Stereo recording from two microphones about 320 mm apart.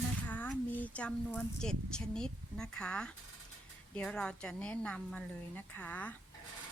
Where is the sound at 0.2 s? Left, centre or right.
Centre.